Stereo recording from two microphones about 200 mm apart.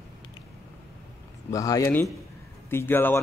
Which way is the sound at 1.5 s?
15° left (ahead or behind).